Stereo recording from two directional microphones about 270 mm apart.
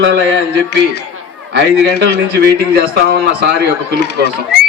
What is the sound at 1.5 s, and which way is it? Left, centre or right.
A man's voice, right.